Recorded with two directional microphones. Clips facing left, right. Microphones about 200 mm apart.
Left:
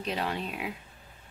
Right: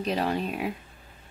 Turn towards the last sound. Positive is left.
turn(degrees=-45)  # may be behind; listen again after turning